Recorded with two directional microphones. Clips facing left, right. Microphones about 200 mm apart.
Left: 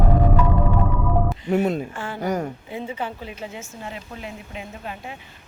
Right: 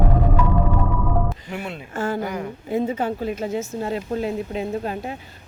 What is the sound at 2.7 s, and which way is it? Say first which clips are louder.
Speech: right 13 dB; 40° right (ahead or behind).